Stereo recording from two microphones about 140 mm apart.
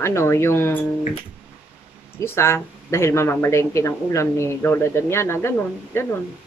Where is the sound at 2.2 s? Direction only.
20° left (ahead or behind).